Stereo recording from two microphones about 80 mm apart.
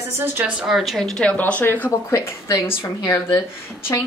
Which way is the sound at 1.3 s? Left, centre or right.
Centre.